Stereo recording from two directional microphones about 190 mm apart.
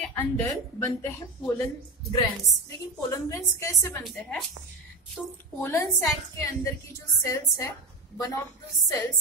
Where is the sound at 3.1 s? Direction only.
15° left (ahead or behind).